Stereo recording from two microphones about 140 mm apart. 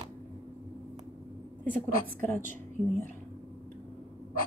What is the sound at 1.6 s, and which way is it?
Speech, 15° left (ahead or behind).